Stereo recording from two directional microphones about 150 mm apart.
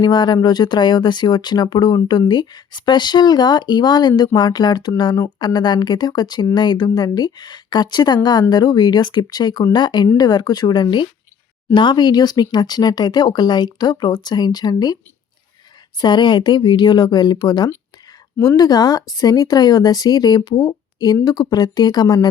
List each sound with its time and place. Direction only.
0.0 s speech: 30° left (ahead or behind)
16.0 s speech: 30° left (ahead or behind)